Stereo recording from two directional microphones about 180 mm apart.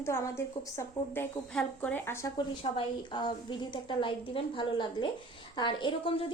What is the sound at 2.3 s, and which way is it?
A woman's voice, 25° left (ahead or behind).